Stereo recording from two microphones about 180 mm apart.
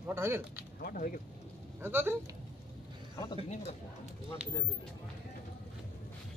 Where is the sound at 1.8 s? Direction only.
10° right (ahead or behind).